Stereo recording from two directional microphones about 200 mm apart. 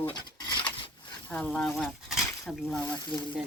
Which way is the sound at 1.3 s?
5° left (ahead or behind).